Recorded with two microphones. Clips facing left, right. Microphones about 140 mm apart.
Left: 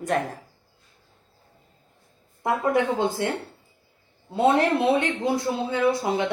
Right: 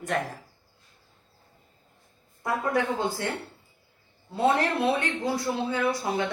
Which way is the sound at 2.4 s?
25° left (ahead or behind).